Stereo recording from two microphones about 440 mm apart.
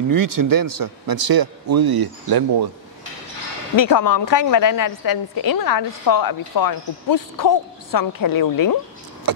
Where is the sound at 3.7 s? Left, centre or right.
Left.